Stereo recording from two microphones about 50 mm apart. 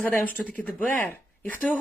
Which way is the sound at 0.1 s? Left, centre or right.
Left.